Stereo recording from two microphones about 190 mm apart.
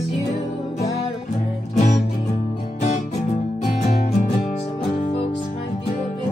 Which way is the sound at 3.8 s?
40° left (ahead or behind).